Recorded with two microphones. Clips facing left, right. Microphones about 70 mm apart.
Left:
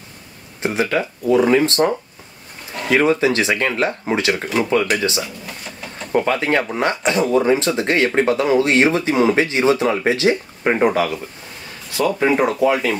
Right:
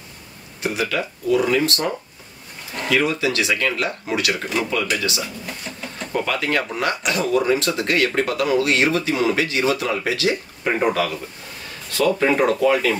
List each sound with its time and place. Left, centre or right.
0.6 s speech: left
12.2 s speech: centre